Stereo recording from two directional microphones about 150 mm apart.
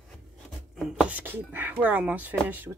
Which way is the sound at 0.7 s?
5° right (ahead or behind).